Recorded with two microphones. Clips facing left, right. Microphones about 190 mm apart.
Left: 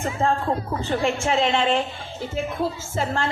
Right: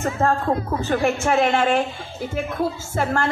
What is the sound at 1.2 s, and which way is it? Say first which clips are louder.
Speech: right 2 dB; 55° right (ahead or behind).